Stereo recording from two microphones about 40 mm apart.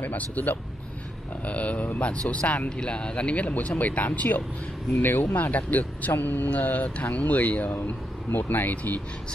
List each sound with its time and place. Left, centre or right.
0.0 s speech: left
5.0 s speech: left
6.1 s speech: left
8.4 s speech: left